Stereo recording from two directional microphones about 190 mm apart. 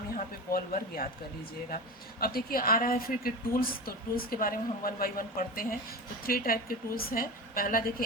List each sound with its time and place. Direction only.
0.5 s a woman's voice: 50° left (ahead or behind)
2.2 s a woman's voice: 50° left (ahead or behind)